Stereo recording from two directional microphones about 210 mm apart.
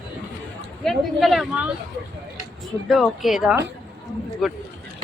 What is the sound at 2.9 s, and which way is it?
Speech, centre (ahead or behind).